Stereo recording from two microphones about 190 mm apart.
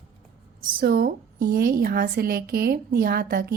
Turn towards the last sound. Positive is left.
turn(degrees=-50)  # may be behind; listen again after turning